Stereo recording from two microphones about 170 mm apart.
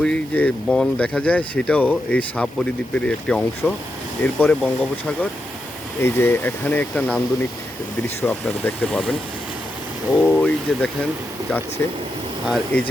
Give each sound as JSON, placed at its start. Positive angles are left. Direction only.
{"t": 0.0, "sound": "speech", "side_deg": 5}
{"t": 10.2, "sound": "speech", "side_deg": 5}
{"t": 12.7, "sound": "speech", "side_deg": 10}